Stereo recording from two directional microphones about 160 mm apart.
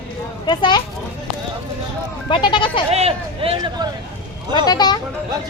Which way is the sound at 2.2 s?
30° left (ahead or behind).